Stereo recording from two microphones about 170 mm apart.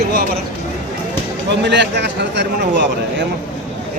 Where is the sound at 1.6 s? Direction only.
90° right.